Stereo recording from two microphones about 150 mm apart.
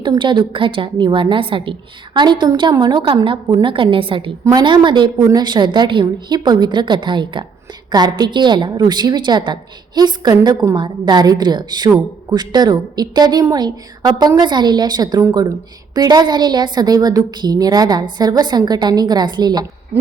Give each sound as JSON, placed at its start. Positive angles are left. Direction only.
{"t": 0.0, "sound": "a woman's voice", "side_deg": -30}